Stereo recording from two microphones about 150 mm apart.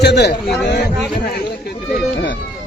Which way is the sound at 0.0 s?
90° left.